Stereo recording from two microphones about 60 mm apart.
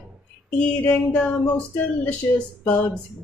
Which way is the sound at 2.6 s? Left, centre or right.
Left.